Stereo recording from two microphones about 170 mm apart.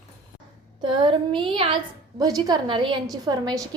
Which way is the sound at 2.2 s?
20° right (ahead or behind).